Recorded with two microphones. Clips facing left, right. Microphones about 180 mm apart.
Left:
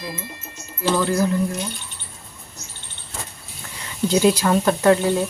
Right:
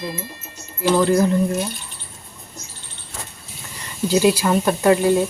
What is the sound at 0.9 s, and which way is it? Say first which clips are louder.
Speech: right 4 dB; 15° right (ahead or behind).